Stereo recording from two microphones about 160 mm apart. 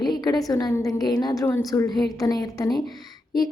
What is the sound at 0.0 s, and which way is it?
A woman's voice, 25° left (ahead or behind).